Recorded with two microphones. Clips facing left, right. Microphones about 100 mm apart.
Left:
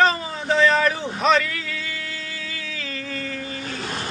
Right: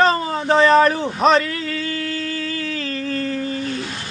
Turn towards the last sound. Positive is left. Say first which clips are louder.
# right 7 dB
turn(degrees=-45)  # may be behind; listen again after turning